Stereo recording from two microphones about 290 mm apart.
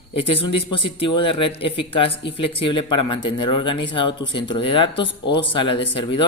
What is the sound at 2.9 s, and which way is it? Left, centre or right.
Speech, left.